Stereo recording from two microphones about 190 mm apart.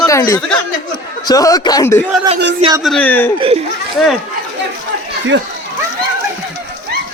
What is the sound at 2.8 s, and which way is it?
Speech, 5° left (ahead or behind).